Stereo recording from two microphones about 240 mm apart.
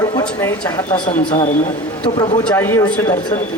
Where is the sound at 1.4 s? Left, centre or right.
Left.